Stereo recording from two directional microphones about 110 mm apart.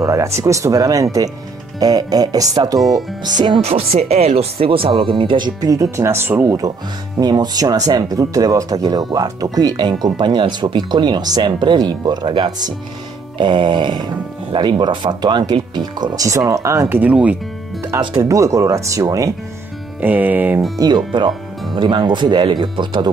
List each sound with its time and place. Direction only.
0.0 s speech: 30° right (ahead or behind); by 3.6 s 45° right (ahead or behind)
3.6 s speech: 70° right (ahead or behind); by 6.5 s 20° right (ahead or behind)
7.2 s speech: 35° right (ahead or behind)
16.9 s speech: 15° right (ahead or behind)
17.9 s speech: 25° right (ahead or behind)
20.0 s speech: 15° right (ahead or behind)
20.7 s speech: 40° right (ahead or behind)